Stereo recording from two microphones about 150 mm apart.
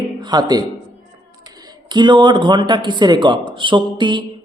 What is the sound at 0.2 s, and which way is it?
Speech, 30° right (ahead or behind).